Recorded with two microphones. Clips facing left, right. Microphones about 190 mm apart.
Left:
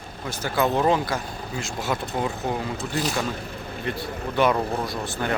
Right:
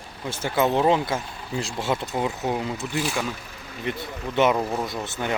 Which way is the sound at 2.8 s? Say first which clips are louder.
Left 1 dB; 40° left (ahead or behind).